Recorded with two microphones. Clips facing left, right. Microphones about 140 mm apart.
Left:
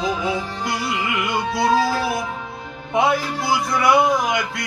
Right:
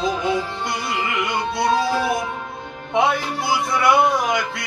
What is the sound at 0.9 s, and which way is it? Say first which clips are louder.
Music: right 1 dB; centre (ahead or behind).